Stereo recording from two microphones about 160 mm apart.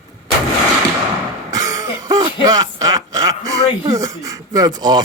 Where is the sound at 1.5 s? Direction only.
20° right (ahead or behind).